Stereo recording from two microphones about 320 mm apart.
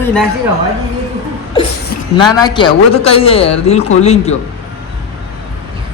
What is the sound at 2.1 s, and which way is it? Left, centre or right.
A man's voice, centre.